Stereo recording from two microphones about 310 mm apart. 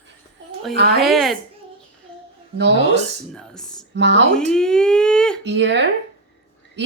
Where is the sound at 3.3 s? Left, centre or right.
Centre.